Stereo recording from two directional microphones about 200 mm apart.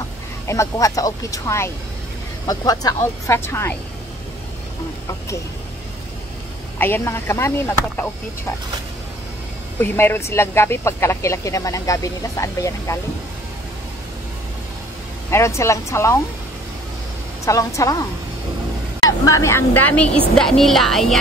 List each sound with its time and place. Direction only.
0.5 s speech: 15° left (ahead or behind)
6.8 s speech: 10° left (ahead or behind)
9.8 s speech: 10° left (ahead or behind)
15.3 s speech: 15° left (ahead or behind)
17.5 s speech: 15° left (ahead or behind)
19.0 s speech: 15° left (ahead or behind)